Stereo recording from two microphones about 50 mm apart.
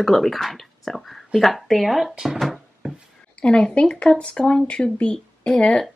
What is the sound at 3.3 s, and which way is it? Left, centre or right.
Speech, centre.